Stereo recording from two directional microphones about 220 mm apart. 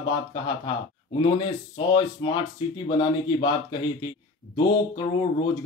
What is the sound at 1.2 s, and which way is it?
Speech, 20° left (ahead or behind).